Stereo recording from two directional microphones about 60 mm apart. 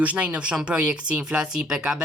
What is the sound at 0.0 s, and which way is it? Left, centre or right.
Speech, right.